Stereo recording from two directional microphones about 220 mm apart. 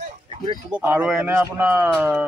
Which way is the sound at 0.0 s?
25° right (ahead or behind).